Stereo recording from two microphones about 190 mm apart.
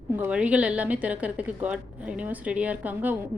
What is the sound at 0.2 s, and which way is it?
A woman's voice, 5° right (ahead or behind).